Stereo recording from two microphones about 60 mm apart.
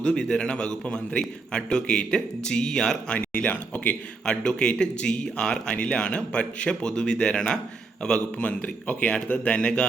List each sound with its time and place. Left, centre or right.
0.0 s a man's voice: centre
3.2 s a man's voice: left
8.4 s a man's voice: left